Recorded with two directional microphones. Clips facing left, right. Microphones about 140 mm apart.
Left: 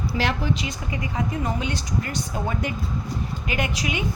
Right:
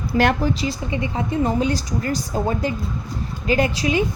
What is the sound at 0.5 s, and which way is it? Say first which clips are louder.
Speech: right 4 dB; 35° right (ahead or behind).